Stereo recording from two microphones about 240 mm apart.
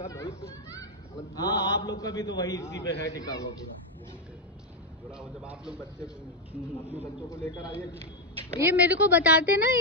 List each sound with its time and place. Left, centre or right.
0.0 s children playing: centre
1.3 s a man's voice: centre
2.7 s a man's voice: left
3.1 s a man's voice: centre
5.1 s a man's voice: centre
7.2 s a man's voice: centre
8.5 s a woman's voice: centre